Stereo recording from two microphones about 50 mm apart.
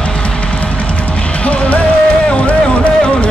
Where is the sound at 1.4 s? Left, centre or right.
Left.